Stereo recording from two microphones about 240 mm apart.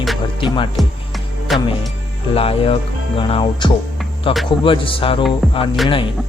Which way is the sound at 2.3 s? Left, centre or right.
Left.